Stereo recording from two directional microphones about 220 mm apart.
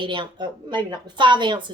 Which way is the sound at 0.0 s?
20° right (ahead or behind).